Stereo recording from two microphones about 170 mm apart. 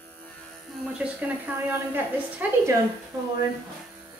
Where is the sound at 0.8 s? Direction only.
5° right (ahead or behind).